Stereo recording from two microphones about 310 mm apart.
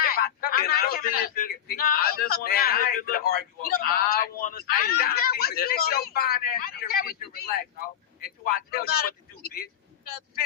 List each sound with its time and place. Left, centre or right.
0.0 s speech: left
8.4 s speech: left